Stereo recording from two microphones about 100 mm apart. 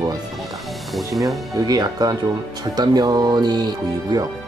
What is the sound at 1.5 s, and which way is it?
Speech, 40° right (ahead or behind).